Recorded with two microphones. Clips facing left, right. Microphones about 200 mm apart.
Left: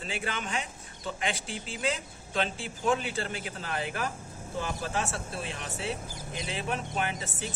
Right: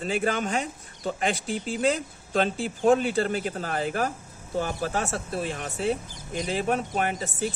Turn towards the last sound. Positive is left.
turn(degrees=-40)  # may be behind; listen again after turning